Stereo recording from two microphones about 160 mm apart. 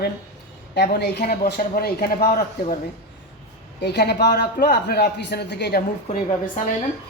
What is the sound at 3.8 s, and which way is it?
A man's voice, 90° left.